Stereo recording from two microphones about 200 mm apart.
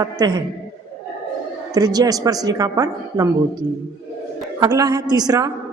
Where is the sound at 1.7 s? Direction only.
20° right (ahead or behind).